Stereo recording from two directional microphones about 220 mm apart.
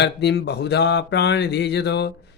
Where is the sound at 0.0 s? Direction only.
50° left (ahead or behind).